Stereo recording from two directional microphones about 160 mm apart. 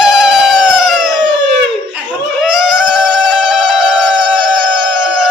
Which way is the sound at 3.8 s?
5° right (ahead or behind).